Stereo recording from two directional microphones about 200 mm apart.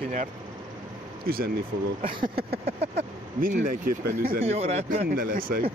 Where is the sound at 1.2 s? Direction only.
50° right (ahead or behind).